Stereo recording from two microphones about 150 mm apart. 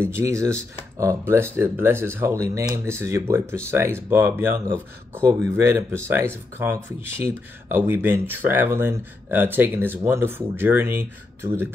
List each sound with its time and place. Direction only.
0.1 s speech: 20° right (ahead or behind)